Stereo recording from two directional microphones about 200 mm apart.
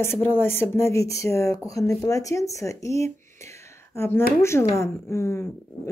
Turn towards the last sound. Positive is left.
turn(degrees=15)  # may be behind; listen again after turning